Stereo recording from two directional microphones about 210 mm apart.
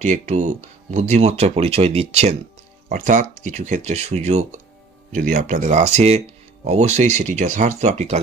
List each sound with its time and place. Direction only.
0.0 s speech: 35° right (ahead or behind)